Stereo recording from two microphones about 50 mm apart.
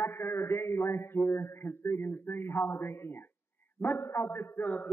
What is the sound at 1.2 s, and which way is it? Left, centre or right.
A man's voice, left.